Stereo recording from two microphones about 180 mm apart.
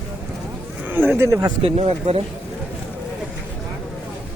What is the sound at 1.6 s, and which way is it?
Speech, 35° right (ahead or behind).